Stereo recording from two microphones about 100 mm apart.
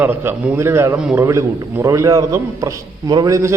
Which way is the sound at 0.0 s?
20° right (ahead or behind).